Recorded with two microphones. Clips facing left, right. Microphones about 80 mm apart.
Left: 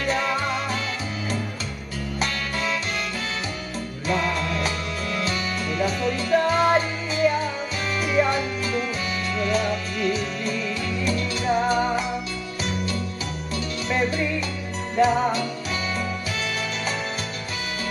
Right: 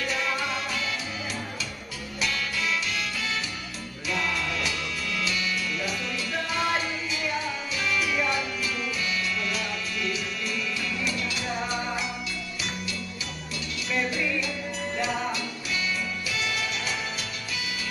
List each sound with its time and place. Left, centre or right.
0.0 s music: left
2.1 s music: left
4.1 s music: left
13.9 s music: left
15.0 s jingle bell: left